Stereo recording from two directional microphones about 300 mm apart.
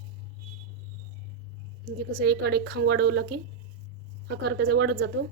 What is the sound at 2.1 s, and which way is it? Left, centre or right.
A woman's voice, right.